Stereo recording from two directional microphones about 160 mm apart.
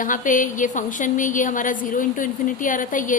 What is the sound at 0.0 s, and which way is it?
A woman's voice, 55° left (ahead or behind).